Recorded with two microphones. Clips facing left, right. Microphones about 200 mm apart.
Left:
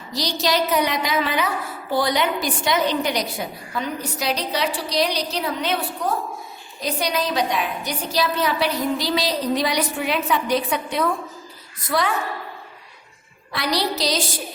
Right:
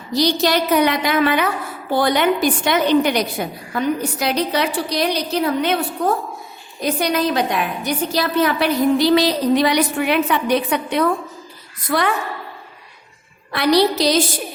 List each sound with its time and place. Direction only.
0.1 s a woman's voice: 55° right (ahead or behind)
13.5 s a woman's voice: 60° right (ahead or behind)